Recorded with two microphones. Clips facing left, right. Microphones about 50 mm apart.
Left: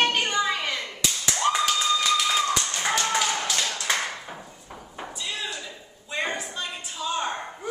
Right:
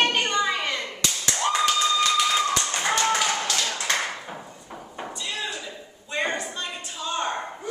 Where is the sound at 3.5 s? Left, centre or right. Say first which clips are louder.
Right 1 dB; centre.